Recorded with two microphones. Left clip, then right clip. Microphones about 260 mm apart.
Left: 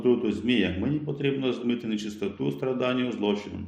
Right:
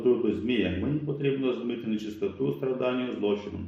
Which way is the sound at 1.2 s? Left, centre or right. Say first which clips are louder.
Left 1 dB; left.